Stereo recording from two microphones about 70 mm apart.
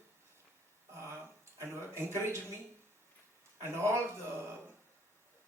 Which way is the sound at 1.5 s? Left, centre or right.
Right.